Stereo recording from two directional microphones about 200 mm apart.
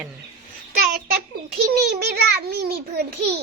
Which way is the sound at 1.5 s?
55° right (ahead or behind).